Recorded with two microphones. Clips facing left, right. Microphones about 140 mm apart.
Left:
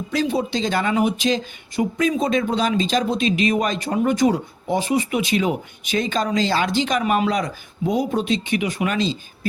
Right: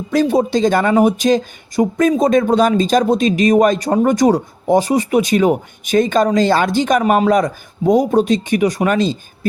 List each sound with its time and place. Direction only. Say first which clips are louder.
0.1 s speech: right 8 dB; 45° right (ahead or behind)